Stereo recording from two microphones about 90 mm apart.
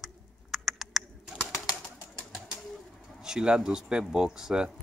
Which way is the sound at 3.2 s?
10° right (ahead or behind).